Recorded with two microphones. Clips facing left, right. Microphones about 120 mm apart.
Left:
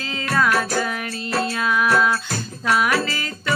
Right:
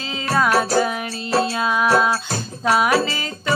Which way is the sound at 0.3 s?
25° right (ahead or behind).